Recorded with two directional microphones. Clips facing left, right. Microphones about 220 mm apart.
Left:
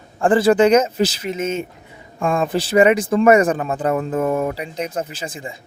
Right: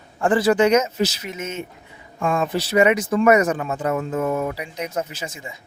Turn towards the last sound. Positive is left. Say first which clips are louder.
# left 3 dB
turn(degrees=30)  # may be behind; listen again after turning